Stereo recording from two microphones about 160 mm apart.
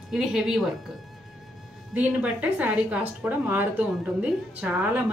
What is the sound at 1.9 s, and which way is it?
A woman's voice, 10° right (ahead or behind).